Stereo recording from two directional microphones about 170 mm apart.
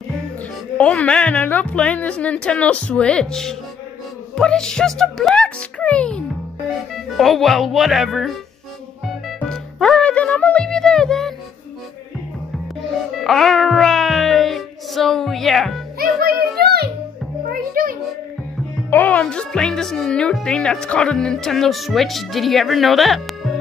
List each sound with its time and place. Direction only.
0.7 s speech: 10° left (ahead or behind)
9.0 s music: centre (ahead or behind)
13.2 s music: centre (ahead or behind)
16.0 s music: 65° right (ahead or behind)
17.5 s music: 55° right (ahead or behind)
18.9 s speech: 10° left (ahead or behind)